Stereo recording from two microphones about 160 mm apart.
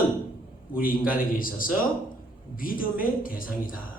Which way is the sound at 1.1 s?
60° left (ahead or behind).